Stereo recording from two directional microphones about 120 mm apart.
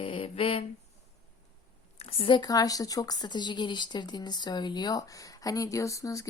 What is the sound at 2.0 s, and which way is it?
Speech, 50° left (ahead or behind).